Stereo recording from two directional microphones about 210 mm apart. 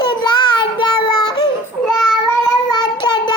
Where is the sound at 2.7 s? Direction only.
20° left (ahead or behind).